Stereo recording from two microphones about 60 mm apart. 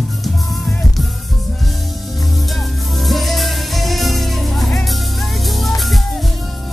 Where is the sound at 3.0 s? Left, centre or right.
Centre.